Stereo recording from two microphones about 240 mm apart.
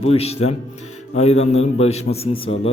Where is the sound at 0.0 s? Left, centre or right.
Left.